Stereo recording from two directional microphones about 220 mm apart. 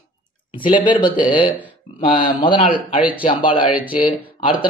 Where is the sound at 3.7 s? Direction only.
5° right (ahead or behind).